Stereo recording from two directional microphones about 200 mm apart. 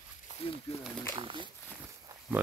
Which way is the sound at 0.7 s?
30° left (ahead or behind).